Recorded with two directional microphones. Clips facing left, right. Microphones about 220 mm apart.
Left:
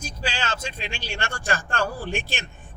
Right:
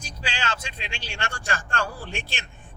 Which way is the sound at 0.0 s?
45° left (ahead or behind).